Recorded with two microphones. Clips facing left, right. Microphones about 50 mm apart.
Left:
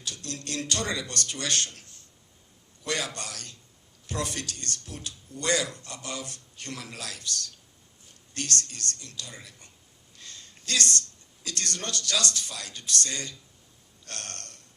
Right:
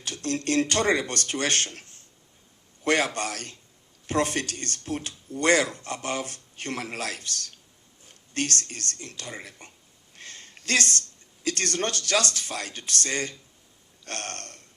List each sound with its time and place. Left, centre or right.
0.0 s speech: right
10.2 s a sound: right
11.4 s speech: right